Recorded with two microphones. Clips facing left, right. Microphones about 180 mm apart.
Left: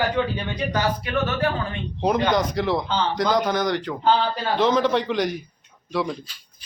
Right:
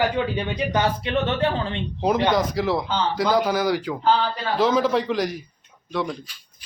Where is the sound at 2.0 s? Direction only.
Centre (ahead or behind).